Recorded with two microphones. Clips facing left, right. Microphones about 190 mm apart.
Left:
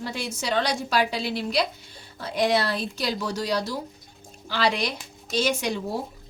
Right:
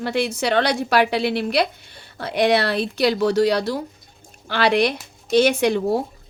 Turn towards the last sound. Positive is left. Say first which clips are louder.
# right 9 dB
turn(degrees=-60)  # may be behind; listen again after turning